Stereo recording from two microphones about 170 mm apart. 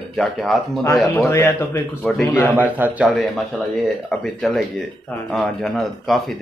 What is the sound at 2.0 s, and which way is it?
Speech, centre (ahead or behind).